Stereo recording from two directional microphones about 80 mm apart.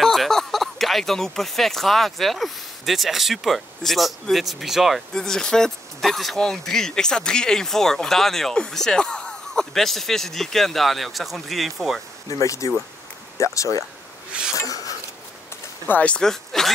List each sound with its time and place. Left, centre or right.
0.0 s speech: centre
5.1 s speech: centre
12.3 s speech: left
14.5 s a sound: left
15.9 s speech: centre